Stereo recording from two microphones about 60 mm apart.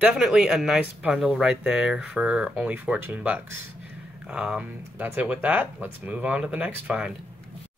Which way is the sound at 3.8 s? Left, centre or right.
Right.